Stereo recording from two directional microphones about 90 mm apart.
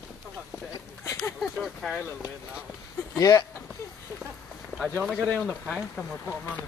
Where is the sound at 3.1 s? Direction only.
40° left (ahead or behind).